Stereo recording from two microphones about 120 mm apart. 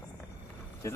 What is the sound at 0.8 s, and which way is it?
Speech, 25° left (ahead or behind).